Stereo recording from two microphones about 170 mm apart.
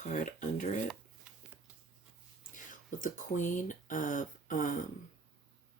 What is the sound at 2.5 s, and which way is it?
Speech, 50° left (ahead or behind).